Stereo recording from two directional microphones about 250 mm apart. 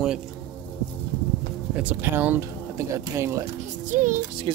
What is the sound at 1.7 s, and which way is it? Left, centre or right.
Speech, centre.